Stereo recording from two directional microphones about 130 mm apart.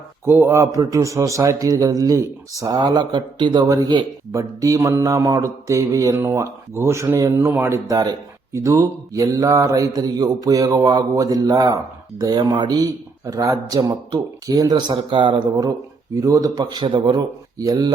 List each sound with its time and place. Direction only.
0.3 s a man's voice: 15° right (ahead or behind)